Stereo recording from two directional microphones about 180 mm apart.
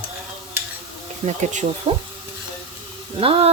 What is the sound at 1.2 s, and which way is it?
Speech, 40° right (ahead or behind).